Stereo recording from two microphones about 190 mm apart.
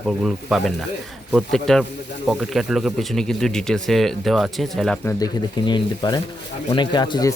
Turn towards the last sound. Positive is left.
turn(degrees=20)  # may be behind; listen again after turning